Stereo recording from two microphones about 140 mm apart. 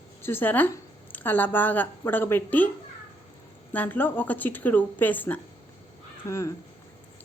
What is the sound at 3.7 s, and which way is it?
Speech, 10° left (ahead or behind).